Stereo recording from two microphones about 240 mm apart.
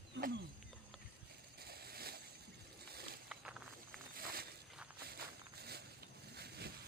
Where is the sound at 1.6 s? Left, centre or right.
Right.